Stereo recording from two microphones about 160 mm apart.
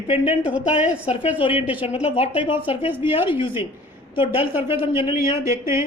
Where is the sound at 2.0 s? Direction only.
35° left (ahead or behind).